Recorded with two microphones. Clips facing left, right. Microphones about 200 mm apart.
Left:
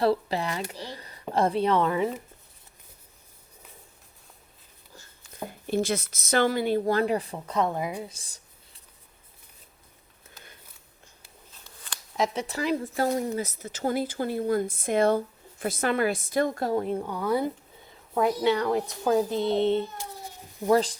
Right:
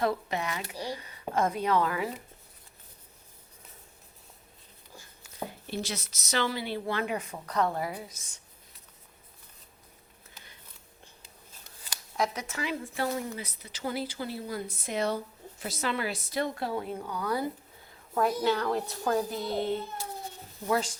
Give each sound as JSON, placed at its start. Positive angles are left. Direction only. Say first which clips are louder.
{"t": 0.0, "sound": "speech", "louder": "left 5 dB", "side_deg": 30}
{"t": 0.7, "sound": "speech", "louder": "right 3 dB", "side_deg": -10}
{"t": 0.9, "sound": "a woman's voice", "louder": "left 5 dB", "side_deg": 35}
{"t": 5.5, "sound": "speech", "louder": "left 11 dB", "side_deg": 50}
{"t": 8.1, "sound": "a sound", "louder": "left 1 dB", "side_deg": 30}
{"t": 12.1, "sound": "speech", "louder": "left 4 dB", "side_deg": 25}
{"t": 18.1, "sound": "a woman's voice", "louder": "left 3 dB", "side_deg": 10}
{"t": 19.3, "sound": "a child's voice", "louder": "left 7 dB", "side_deg": 25}
{"t": 20.7, "sound": "speech", "louder": "left 7 dB", "side_deg": 35}